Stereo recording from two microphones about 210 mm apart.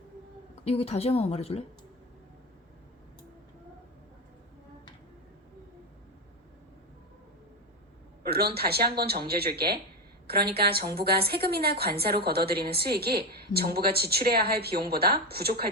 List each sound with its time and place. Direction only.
0.6 s a woman's voice: 30° left (ahead or behind)
8.2 s a woman's voice: 50° right (ahead or behind)